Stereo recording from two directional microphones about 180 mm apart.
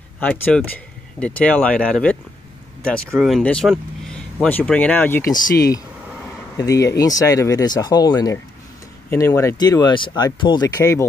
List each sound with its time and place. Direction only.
0.2 s speech: 5° left (ahead or behind)